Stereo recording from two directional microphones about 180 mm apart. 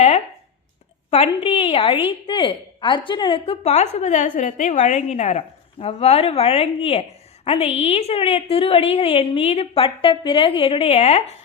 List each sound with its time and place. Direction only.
1.1 s a woman's voice: 35° left (ahead or behind)